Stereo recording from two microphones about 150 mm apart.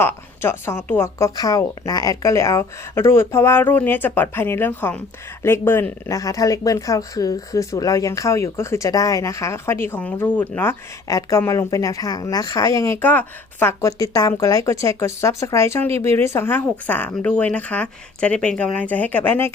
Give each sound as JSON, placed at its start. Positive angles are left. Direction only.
{"t": 0.0, "sound": "a woman's voice", "side_deg": 15}